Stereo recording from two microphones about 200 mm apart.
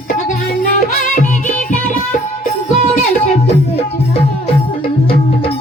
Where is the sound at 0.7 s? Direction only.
40° left (ahead or behind).